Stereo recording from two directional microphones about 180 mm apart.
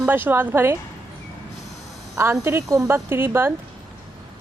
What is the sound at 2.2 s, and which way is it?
A woman's voice, 15° right (ahead or behind).